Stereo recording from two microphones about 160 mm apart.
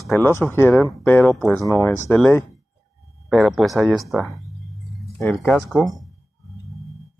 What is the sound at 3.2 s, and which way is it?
Speech, centre (ahead or behind).